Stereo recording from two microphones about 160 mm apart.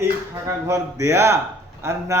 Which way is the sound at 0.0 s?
20° right (ahead or behind).